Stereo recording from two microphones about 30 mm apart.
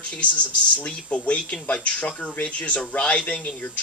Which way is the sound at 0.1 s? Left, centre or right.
Left.